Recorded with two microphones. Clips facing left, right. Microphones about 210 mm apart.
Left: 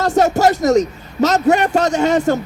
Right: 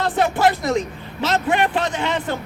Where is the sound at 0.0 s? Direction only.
45° left (ahead or behind).